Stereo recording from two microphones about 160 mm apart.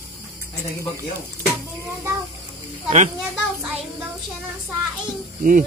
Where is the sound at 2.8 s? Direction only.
45° right (ahead or behind).